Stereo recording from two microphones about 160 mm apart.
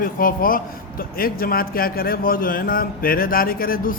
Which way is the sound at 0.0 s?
60° left (ahead or behind).